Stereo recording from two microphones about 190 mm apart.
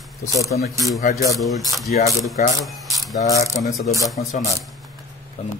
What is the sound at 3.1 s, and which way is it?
Speech, 20° left (ahead or behind).